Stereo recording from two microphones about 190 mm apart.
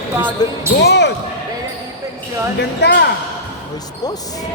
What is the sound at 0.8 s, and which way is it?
Speech, 65° left (ahead or behind).